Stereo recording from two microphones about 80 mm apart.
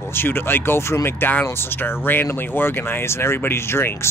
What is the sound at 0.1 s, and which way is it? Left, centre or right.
Speech, left.